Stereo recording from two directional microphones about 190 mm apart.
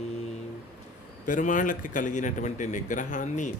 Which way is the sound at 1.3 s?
45° left (ahead or behind).